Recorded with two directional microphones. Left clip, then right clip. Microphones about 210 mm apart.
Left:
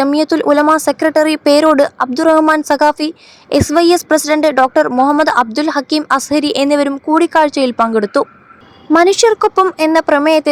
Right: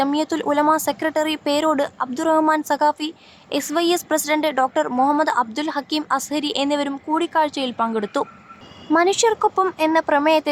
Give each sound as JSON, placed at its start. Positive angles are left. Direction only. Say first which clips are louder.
{"t": 0.0, "sound": "speech", "louder": "left 8 dB", "side_deg": 30}